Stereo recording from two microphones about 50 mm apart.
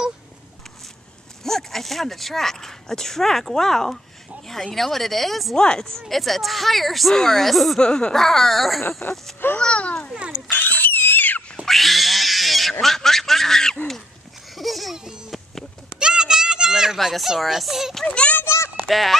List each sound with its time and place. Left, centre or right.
1.4 s speech: centre
5.6 s speech: centre
6.0 s speech: centre
7.8 s speech: centre
9.6 s a child's voice: left
10.1 s speech: right
10.5 s pig: left
11.6 s pig: centre
12.8 s a sound: centre
16.0 s a sound: centre
17.4 s speech: centre
18.0 s a child's voice: left
18.9 s speech: centre